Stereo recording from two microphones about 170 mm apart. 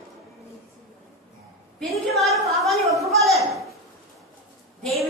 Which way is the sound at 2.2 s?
Centre (ahead or behind).